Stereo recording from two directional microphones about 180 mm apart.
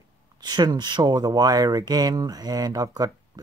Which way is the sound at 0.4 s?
25° right (ahead or behind).